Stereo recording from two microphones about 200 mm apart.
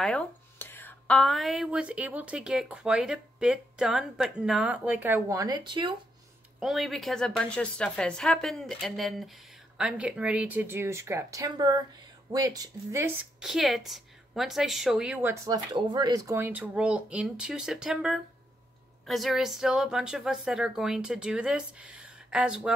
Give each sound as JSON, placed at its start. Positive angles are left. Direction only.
{"t": 0.0, "sound": "speech", "side_deg": 5}
{"t": 6.6, "sound": "speech", "side_deg": 0}
{"t": 13.4, "sound": "a woman's voice", "side_deg": 0}
{"t": 15.4, "sound": "speech", "side_deg": -20}